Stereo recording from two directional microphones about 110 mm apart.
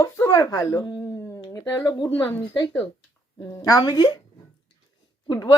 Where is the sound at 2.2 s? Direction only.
20° left (ahead or behind).